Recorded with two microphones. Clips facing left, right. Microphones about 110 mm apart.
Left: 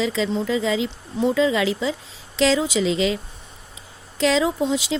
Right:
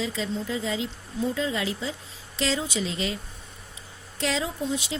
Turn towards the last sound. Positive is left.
turn(degrees=90)